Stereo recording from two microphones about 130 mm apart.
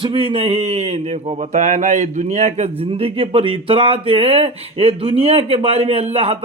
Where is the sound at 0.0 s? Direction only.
45° right (ahead or behind).